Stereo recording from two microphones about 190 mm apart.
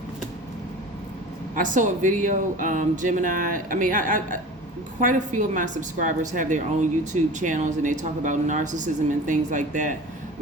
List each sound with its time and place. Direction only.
1.5 s a woman's voice: 45° right (ahead or behind)